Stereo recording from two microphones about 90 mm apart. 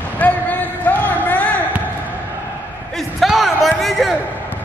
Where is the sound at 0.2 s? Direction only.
20° left (ahead or behind).